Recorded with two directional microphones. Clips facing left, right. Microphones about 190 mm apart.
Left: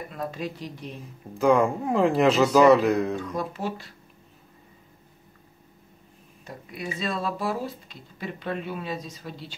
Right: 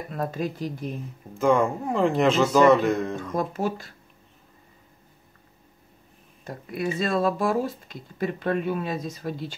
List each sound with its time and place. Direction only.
0.1 s speech: 45° right (ahead or behind)
1.4 s speech: centre (ahead or behind)
3.3 s speech: 45° right (ahead or behind)
6.4 s speech: 50° right (ahead or behind)